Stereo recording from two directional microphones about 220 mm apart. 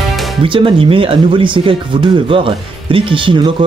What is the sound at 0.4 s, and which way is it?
Speech, 25° right (ahead or behind).